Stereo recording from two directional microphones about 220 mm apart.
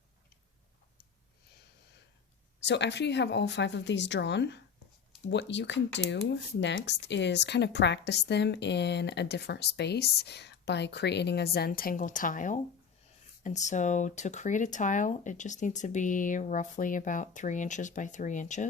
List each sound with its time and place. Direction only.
2.6 s speech: 50° left (ahead or behind); by 18.7 s 35° left (ahead or behind)